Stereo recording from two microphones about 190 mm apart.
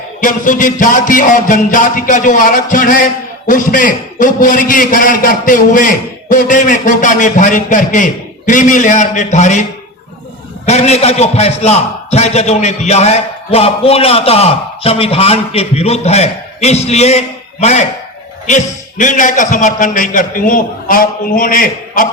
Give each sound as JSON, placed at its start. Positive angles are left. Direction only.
{"t": 0.2, "sound": "a man's voice", "side_deg": 45}
{"t": 10.7, "sound": "a man's voice", "side_deg": 35}